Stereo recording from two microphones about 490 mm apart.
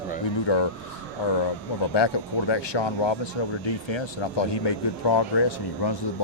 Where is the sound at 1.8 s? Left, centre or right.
Left.